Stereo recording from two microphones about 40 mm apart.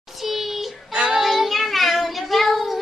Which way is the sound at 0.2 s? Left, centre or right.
Centre.